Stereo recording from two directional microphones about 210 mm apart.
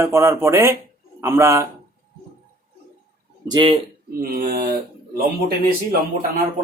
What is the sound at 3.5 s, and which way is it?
Speech, 20° right (ahead or behind).